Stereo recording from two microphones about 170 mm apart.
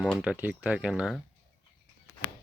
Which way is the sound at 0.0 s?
5° right (ahead or behind).